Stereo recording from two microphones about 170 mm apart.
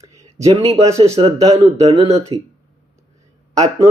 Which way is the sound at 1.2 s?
35° right (ahead or behind).